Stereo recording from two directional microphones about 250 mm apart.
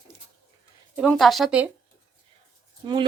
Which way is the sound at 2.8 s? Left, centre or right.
Centre.